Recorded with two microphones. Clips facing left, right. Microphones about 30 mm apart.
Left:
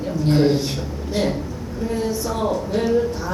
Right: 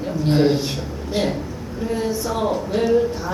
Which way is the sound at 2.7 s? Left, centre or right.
Centre.